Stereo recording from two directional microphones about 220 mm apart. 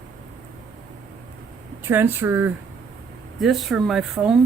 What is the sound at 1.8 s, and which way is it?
Speech, 10° right (ahead or behind).